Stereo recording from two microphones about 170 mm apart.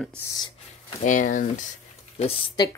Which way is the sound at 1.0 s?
50° left (ahead or behind).